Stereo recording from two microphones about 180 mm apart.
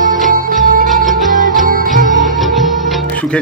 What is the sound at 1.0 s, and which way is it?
Music, centre (ahead or behind).